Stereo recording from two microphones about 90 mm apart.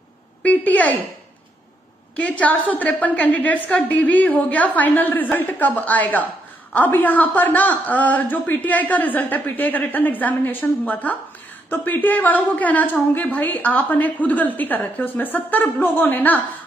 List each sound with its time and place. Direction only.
0.4 s a woman's voice: 15° left (ahead or behind)
2.1 s a woman's voice: 15° left (ahead or behind)